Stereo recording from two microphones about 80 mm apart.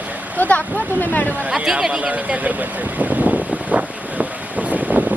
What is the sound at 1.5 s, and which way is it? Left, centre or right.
Vehicle, centre.